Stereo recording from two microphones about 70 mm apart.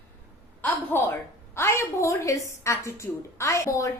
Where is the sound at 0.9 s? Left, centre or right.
Left.